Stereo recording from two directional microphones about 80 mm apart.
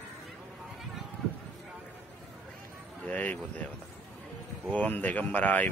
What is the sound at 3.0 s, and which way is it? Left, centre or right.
Speech, centre.